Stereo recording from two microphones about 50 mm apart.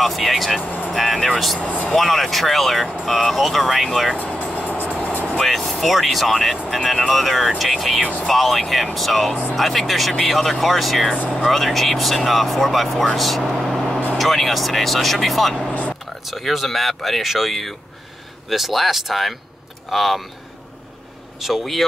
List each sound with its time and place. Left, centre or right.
0.0 s speech: centre
0.6 s speech: left
0.9 s speech: centre
1.6 s speech: left
2.0 s speech: centre
4.2 s music: left
5.4 s speech: centre
8.0 s speech: left
8.3 s speech: centre
13.6 s vehicle: centre
14.1 s speech: centre
21.4 s speech: centre